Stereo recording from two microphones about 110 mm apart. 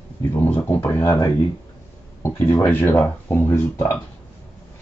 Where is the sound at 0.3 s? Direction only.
20° left (ahead or behind).